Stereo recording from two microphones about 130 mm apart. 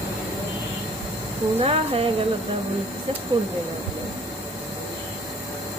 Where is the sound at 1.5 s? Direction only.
45° right (ahead or behind).